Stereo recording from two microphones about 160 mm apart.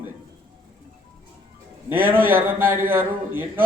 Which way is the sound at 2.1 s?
60° right (ahead or behind).